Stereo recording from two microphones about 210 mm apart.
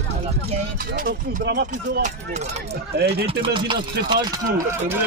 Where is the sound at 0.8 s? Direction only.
45° right (ahead or behind).